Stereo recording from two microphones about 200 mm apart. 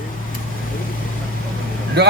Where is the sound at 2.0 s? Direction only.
55° right (ahead or behind).